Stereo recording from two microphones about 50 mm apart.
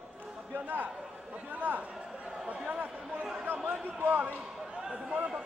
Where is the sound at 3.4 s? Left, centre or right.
Right.